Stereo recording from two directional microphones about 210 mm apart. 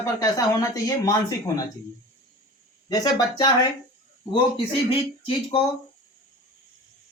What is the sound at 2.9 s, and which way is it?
Speech, 20° left (ahead or behind).